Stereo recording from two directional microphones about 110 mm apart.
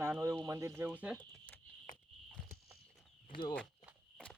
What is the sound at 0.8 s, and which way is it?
Speech, 15° right (ahead or behind).